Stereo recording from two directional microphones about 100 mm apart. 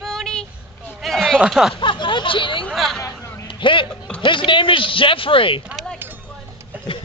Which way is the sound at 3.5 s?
55° left (ahead or behind).